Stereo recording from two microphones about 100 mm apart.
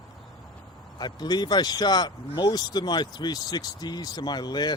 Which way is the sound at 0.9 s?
45° left (ahead or behind).